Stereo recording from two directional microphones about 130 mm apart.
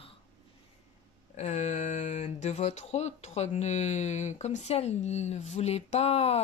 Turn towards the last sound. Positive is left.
turn(degrees=50)  # may be behind; listen again after turning